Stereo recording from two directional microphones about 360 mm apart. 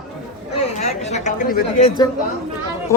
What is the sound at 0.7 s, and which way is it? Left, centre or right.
Chatter, centre.